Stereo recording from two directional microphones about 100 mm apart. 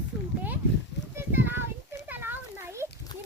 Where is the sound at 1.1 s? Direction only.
20° right (ahead or behind).